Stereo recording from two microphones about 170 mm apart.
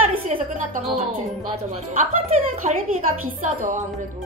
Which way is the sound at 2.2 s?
45° right (ahead or behind).